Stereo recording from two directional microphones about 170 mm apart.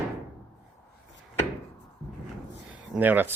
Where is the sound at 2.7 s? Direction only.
10° right (ahead or behind).